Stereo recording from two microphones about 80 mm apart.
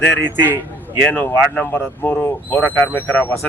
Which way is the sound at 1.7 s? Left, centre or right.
Left.